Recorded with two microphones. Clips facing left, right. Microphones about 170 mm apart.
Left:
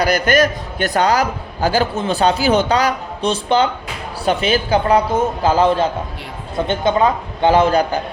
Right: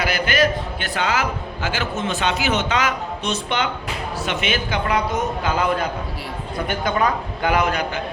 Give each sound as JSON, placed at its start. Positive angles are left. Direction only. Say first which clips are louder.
{"t": 0.0, "sound": "a man's voice", "louder": "left 5 dB", "side_deg": 40}